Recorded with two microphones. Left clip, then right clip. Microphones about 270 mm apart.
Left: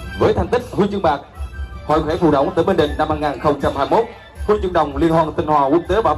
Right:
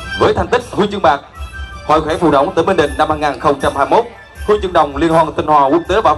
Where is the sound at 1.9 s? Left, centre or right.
Right.